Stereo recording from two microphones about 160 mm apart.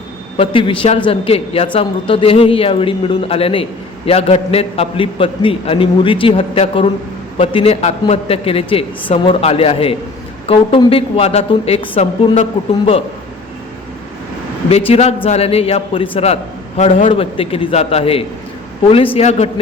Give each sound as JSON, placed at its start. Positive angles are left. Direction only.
{"t": 0.3, "sound": "a man's voice", "side_deg": 35}
{"t": 14.7, "sound": "a man's voice", "side_deg": 40}